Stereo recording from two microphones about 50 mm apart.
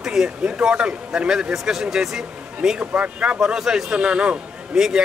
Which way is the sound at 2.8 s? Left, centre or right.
Right.